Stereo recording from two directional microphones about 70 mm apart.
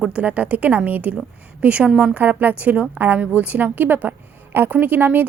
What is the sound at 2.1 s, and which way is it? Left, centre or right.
A woman's voice, right.